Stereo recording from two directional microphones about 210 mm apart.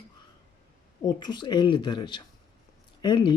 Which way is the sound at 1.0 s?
20° left (ahead or behind).